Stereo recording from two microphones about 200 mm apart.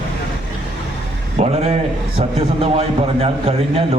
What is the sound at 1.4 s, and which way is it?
Speech, 35° right (ahead or behind).